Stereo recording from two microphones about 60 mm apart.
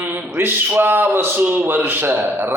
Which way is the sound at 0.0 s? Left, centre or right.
Right.